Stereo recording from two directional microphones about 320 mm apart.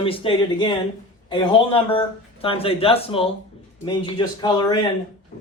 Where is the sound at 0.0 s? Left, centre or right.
Centre.